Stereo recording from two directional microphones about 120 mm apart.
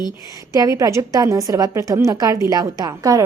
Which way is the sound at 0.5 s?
30° right (ahead or behind).